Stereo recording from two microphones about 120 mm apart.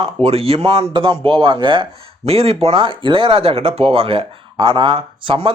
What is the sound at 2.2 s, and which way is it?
Speech, 55° right (ahead or behind).